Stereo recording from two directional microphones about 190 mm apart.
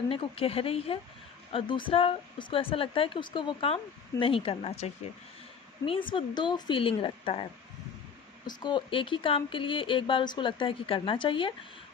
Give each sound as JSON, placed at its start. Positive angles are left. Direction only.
{"t": 0.1, "sound": "speech", "side_deg": 30}
{"t": 8.4, "sound": "speech", "side_deg": 25}